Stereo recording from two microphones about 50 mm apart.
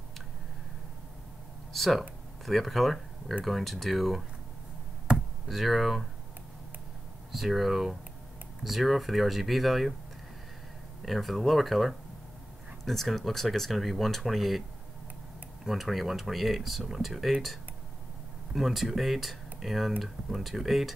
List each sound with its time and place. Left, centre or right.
1.7 s speech: centre
5.1 s chop: centre
5.5 s speech: centre
7.3 s speech: centre
11.1 s speech: centre
15.6 s speech: centre